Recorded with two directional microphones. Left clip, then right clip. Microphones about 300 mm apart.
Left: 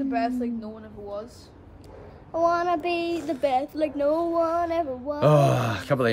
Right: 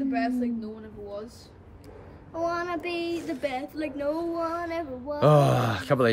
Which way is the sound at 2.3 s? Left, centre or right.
Centre.